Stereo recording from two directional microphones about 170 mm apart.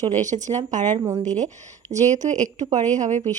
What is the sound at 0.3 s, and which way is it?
Speech, 35° right (ahead or behind).